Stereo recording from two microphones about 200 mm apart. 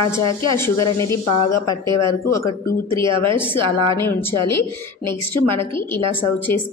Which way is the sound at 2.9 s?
25° right (ahead or behind).